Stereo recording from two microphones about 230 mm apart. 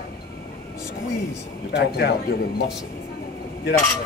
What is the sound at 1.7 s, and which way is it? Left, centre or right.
Speech, left.